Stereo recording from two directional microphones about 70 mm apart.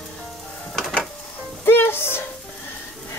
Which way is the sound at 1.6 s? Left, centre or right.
Left.